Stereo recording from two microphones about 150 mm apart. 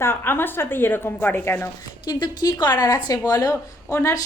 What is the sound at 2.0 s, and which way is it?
A woman's voice, 30° left (ahead or behind).